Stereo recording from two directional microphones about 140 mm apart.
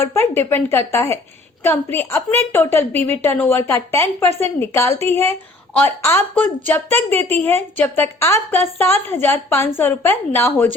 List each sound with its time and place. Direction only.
0.0 s a woman's voice: 20° left (ahead or behind)